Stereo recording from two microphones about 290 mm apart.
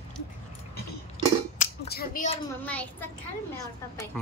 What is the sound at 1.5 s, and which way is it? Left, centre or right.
Scissors, left.